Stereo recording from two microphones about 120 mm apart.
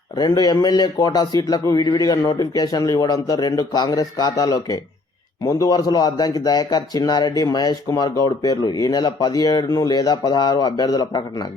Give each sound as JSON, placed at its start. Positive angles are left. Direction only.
{"t": 0.2, "sound": "speech", "side_deg": 35}